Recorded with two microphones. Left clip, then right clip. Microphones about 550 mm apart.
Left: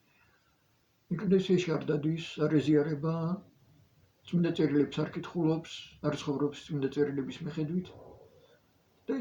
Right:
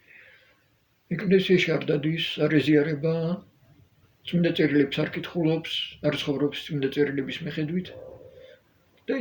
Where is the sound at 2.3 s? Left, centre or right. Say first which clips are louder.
Right 5 dB; left.